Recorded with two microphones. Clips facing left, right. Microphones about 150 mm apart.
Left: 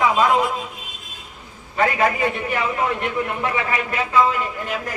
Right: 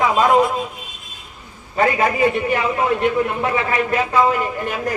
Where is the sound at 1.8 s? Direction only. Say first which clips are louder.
Right 3 dB; 35° right (ahead or behind).